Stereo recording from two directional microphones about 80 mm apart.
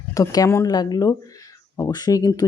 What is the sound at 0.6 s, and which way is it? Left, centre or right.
Speech, left.